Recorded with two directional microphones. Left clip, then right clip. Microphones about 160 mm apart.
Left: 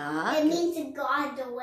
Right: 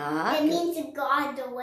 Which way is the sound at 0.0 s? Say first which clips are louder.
Right 1 dB; 20° right (ahead or behind).